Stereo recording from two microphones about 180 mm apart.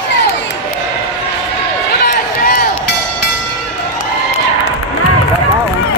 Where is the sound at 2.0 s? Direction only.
60° left (ahead or behind).